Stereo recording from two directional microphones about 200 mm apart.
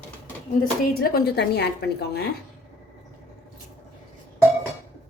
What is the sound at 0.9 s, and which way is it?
A woman's voice, 50° left (ahead or behind).